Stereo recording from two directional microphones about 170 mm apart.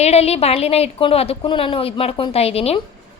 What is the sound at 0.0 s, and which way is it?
A woman's voice, 40° left (ahead or behind).